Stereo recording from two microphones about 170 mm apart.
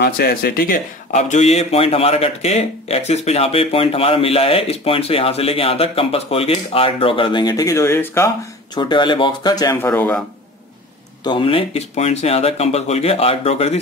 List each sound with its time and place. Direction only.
0.0 s speech: 65° left (ahead or behind)
1.1 s speech: 45° left (ahead or behind); by 8.3 s 15° left (ahead or behind)
8.7 s speech: 25° left (ahead or behind)
9.8 s a man's voice: 10° left (ahead or behind)
11.2 s speech: 30° left (ahead or behind)